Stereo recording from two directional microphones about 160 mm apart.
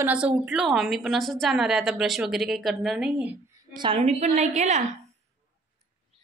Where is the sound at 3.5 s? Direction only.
30° right (ahead or behind).